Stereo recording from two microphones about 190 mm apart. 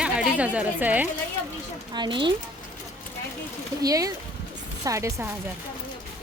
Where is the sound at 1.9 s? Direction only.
25° right (ahead or behind).